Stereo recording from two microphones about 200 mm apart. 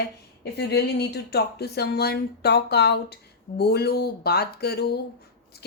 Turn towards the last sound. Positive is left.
turn(degrees=55)  # may be behind; listen again after turning